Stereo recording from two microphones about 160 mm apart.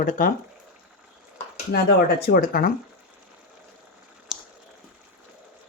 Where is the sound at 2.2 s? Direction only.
70° left (ahead or behind).